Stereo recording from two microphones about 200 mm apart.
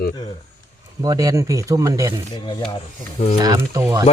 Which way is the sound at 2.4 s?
20° left (ahead or behind).